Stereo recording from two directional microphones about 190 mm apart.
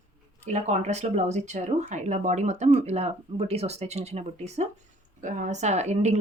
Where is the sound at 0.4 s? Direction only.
35° right (ahead or behind).